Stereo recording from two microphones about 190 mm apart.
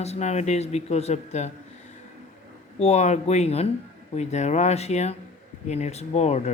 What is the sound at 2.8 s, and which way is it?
Speech, 35° left (ahead or behind).